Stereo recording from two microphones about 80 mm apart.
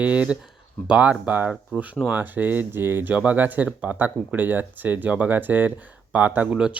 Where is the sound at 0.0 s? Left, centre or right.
Centre.